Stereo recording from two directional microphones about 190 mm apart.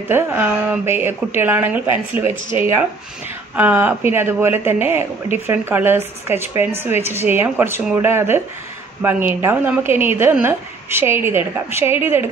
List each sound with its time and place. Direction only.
0.1 s a woman's voice: 10° right (ahead or behind)